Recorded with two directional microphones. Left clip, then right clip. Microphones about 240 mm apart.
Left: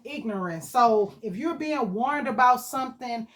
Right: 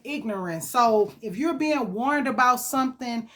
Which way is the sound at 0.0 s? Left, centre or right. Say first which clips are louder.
Right 2 dB; right.